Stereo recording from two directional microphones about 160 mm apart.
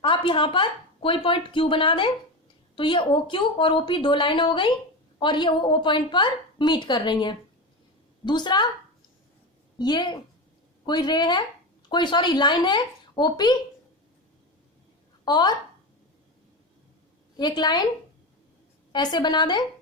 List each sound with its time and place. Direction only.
0.0 s a woman's voice: 30° left (ahead or behind)
9.7 s a woman's voice: 25° left (ahead or behind)
15.2 s speech: 25° left (ahead or behind)
17.3 s a woman's voice: 25° left (ahead or behind)
18.9 s a woman's voice: 25° left (ahead or behind)